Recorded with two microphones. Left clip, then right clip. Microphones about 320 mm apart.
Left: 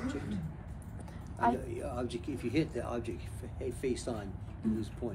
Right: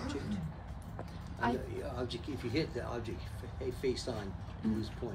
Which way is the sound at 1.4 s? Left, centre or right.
Left.